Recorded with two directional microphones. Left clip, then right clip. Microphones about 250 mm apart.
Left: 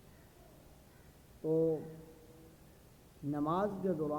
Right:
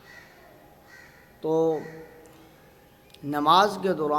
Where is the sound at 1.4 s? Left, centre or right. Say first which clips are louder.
Right 9 dB; right.